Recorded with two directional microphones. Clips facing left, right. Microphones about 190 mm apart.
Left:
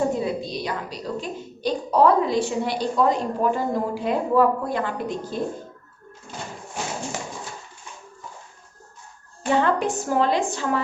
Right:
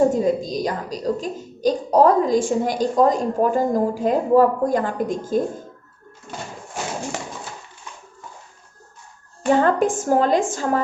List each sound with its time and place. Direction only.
0.1 s a woman's voice: 40° right (ahead or behind)
9.5 s a woman's voice: 45° right (ahead or behind)